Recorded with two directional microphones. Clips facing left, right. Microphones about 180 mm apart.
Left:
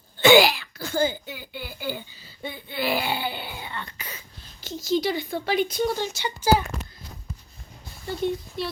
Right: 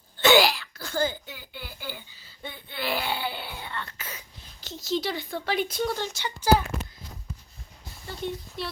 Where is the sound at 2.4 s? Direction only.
5° left (ahead or behind).